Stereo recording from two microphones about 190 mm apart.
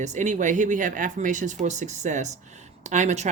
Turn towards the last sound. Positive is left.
turn(degrees=-40)  # may be behind; listen again after turning